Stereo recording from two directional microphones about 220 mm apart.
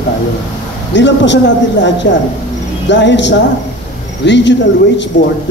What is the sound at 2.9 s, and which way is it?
A man's voice, 55° left (ahead or behind).